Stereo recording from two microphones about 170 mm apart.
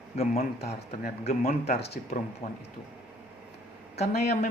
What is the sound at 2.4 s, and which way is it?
Speech, 45° left (ahead or behind).